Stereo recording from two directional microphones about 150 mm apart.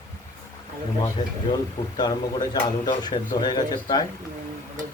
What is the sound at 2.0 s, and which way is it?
Speech, 30° left (ahead or behind).